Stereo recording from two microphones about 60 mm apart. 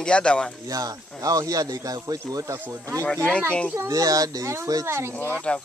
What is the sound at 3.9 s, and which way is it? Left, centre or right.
Speech, right.